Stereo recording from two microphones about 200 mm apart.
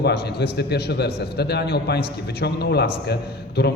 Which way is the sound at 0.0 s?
55° left (ahead or behind).